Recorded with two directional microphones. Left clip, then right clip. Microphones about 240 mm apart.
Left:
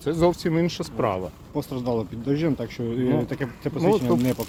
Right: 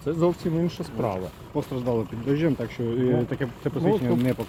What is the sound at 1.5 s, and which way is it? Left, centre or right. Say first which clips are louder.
Speech: even; centre.